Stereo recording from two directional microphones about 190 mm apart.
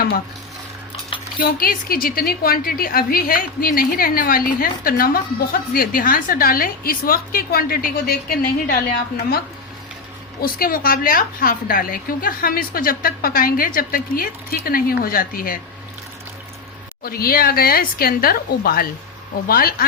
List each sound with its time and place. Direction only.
1.4 s a woman's voice: 50° left (ahead or behind)
10.4 s a woman's voice: 50° left (ahead or behind)
17.0 s a woman's voice: 50° left (ahead or behind)